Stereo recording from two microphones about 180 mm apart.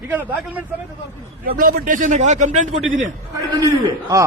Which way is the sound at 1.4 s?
50° right (ahead or behind).